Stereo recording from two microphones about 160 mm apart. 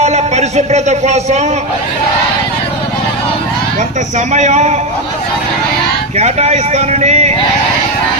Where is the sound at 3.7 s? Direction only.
45° right (ahead or behind).